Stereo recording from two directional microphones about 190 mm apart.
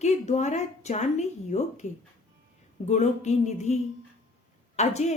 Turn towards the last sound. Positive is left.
turn(degrees=35)  # may be behind; listen again after turning